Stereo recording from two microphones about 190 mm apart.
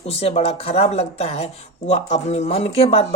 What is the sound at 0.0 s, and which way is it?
Speech, 30° left (ahead or behind).